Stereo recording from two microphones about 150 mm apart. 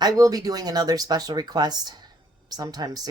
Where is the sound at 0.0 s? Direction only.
25° right (ahead or behind).